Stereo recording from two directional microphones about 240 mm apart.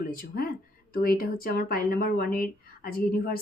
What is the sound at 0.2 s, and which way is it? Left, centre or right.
A woman's voice, left.